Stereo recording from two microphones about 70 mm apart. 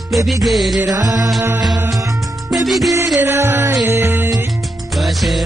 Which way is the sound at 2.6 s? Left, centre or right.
Centre.